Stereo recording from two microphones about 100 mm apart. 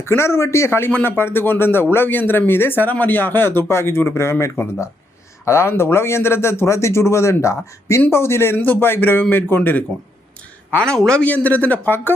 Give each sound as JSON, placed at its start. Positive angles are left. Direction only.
{"t": 0.0, "sound": "speech", "side_deg": 25}